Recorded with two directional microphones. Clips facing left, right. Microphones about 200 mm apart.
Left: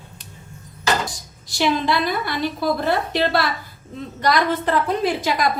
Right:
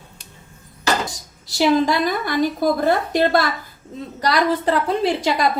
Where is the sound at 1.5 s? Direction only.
40° right (ahead or behind).